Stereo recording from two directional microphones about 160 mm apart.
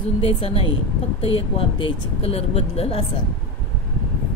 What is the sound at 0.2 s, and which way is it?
Speech, 35° left (ahead or behind).